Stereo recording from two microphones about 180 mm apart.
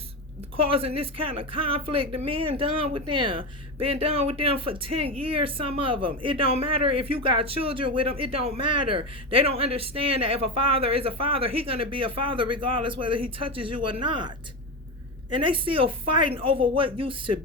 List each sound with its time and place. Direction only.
0.5 s a woman's voice: 30° right (ahead or behind)